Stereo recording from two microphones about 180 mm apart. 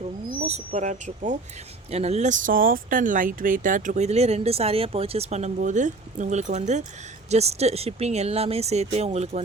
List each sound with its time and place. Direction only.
0.4 s speech: 40° right (ahead or behind)